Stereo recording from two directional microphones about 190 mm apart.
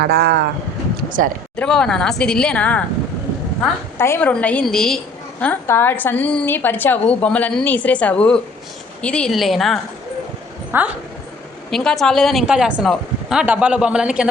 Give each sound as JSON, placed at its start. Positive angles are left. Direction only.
{"t": 0.0, "sound": "speech", "side_deg": -55}
{"t": 1.5, "sound": "speech", "side_deg": 5}
{"t": 3.9, "sound": "a woman's voice", "side_deg": 10}
{"t": 11.7, "sound": "speech", "side_deg": 5}